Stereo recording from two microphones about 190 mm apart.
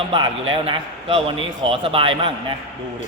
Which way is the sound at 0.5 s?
30° right (ahead or behind).